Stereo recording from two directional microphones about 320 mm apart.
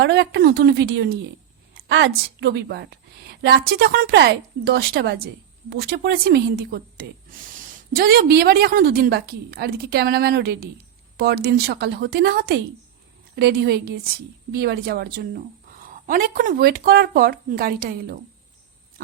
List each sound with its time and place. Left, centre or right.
0.0 s a woman's voice: right
7.9 s a woman's voice: right